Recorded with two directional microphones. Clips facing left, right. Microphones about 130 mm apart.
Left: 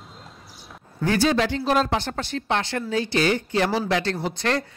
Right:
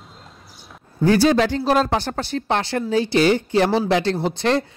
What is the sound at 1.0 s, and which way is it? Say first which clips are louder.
Speech: right 5 dB; 35° right (ahead or behind).